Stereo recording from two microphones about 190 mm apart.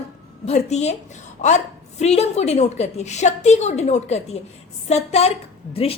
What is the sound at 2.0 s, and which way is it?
A woman's voice, 35° left (ahead or behind).